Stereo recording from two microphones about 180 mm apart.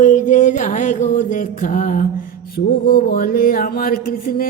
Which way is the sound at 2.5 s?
55° left (ahead or behind).